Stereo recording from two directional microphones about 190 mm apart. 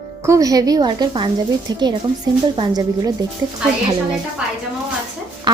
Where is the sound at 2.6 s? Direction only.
20° right (ahead or behind).